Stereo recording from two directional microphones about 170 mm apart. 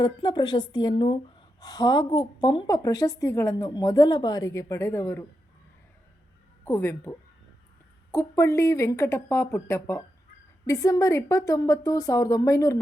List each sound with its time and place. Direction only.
0.0 s a woman's voice: 25° left (ahead or behind)
6.7 s a woman's voice: 15° left (ahead or behind)